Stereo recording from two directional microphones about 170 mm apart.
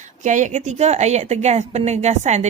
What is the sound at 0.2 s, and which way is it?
A woman's voice, 45° right (ahead or behind).